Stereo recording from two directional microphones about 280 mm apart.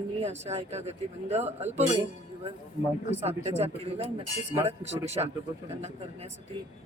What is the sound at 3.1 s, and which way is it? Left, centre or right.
A man's voice, right.